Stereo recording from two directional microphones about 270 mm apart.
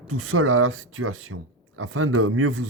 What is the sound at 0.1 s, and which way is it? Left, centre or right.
Speech, right.